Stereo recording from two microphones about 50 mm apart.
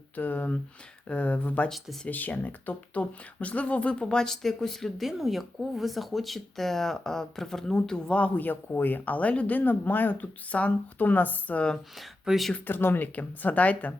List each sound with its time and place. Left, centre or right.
0.2 s speech: left
8.7 s speech: left
12.2 s speech: centre
12.6 s speech: left